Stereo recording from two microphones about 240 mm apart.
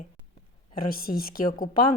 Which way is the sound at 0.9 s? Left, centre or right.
Left.